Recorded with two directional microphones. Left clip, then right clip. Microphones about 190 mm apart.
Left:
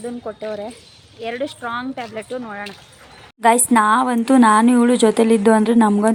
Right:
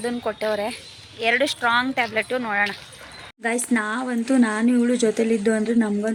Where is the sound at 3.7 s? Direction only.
20° left (ahead or behind).